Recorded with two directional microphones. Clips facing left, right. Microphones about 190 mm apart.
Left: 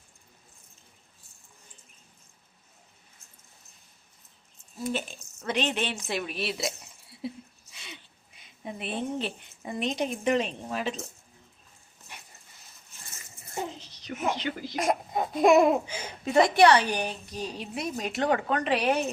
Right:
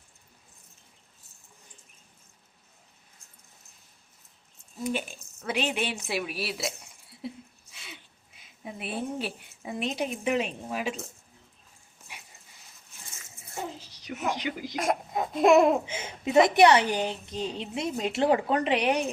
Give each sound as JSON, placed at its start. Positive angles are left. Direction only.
{"t": 4.8, "sound": "a woman's voice", "side_deg": -10}
{"t": 13.4, "sound": "a sound", "side_deg": -10}
{"t": 14.8, "sound": "babbling", "side_deg": 0}
{"t": 15.9, "sound": "a woman's voice", "side_deg": -25}